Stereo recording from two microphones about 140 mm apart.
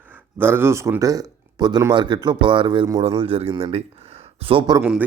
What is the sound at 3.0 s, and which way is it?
Speech, 40° right (ahead or behind).